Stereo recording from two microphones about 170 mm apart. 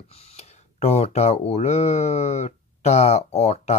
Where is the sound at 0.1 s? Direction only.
40° left (ahead or behind).